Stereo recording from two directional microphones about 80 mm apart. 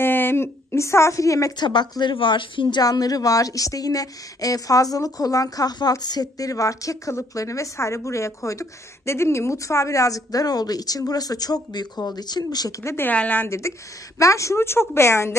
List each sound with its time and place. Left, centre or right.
0.0 s a woman's voice: left
1.6 s a woman's voice: left
2.8 s a woman's voice: left
12.8 s a woman's voice: left
13.1 s a woman's voice: centre
13.5 s a woman's voice: left